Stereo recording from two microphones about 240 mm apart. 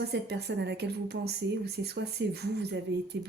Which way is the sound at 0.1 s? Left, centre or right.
Right.